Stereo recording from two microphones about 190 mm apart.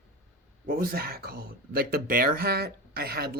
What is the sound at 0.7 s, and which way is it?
Speech, 50° right (ahead or behind).